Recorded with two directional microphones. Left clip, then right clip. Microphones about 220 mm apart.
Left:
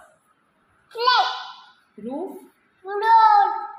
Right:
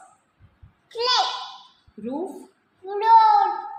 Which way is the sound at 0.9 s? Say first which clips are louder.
Left 3 dB; 15° right (ahead or behind).